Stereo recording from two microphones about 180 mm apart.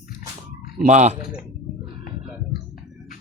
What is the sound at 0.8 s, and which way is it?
Speech, 40° right (ahead or behind).